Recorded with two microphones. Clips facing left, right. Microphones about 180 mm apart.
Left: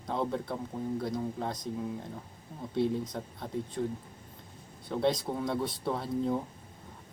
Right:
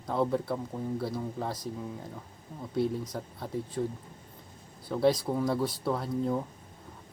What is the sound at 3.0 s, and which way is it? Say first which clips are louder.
Speech: even; centre (ahead or behind).